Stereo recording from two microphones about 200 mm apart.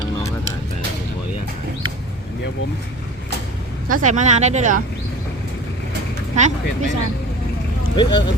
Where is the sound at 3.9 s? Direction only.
40° right (ahead or behind).